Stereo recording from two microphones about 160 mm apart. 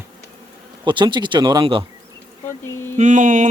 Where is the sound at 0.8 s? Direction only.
30° right (ahead or behind).